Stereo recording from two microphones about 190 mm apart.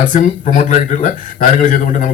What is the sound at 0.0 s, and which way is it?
A man's voice, 40° left (ahead or behind).